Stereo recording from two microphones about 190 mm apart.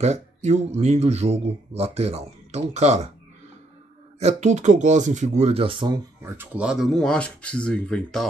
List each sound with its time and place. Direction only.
0.0 s speech: 35° right (ahead or behind)
4.2 s speech: 35° right (ahead or behind)
6.2 s speech: 10° right (ahead or behind)